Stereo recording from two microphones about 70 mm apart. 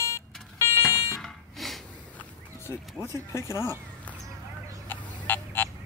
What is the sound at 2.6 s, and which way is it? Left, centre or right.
Speech, left.